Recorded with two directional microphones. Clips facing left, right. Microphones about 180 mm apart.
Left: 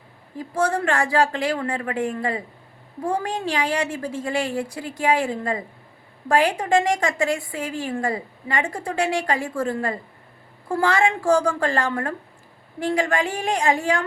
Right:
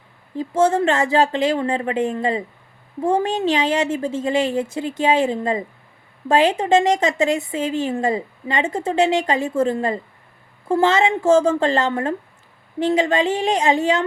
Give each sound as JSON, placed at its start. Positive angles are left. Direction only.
{"t": 0.3, "sound": "a woman's voice", "side_deg": -25}